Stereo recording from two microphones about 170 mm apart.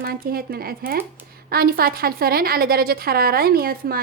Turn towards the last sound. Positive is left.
turn(degrees=-60)  # may be behind; listen again after turning